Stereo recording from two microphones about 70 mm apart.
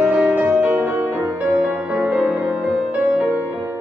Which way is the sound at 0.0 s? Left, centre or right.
Right.